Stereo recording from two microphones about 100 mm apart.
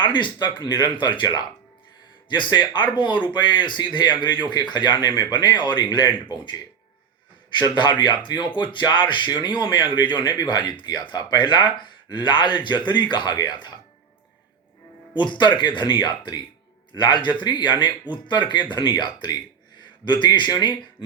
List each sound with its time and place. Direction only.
0.0 s speech: 55° left (ahead or behind)
7.6 s speech: 50° left (ahead or behind)
15.1 s speech: 50° left (ahead or behind)